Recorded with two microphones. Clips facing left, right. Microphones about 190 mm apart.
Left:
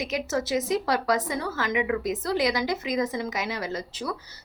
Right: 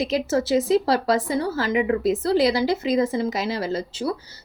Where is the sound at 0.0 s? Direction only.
30° right (ahead or behind).